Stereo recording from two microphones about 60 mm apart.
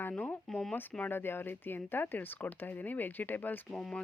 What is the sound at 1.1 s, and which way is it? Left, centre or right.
Speech, left.